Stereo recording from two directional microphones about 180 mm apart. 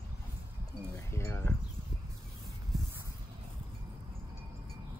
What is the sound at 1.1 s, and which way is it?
Speech, 15° left (ahead or behind).